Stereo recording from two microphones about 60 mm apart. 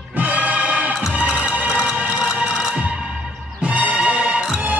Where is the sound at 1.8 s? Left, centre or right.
Centre.